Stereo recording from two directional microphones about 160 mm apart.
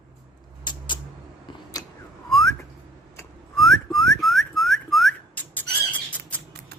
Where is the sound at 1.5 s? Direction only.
30° left (ahead or behind).